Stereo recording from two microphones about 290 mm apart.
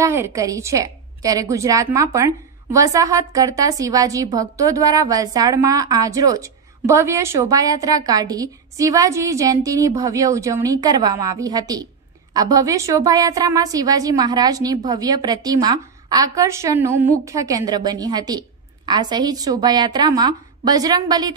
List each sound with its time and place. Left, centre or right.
0.0 s a woman's voice: centre